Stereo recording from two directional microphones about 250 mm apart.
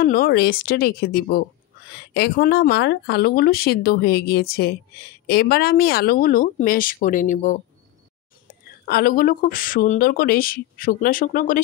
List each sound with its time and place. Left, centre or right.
0.0 s speech: left
8.8 s speech: left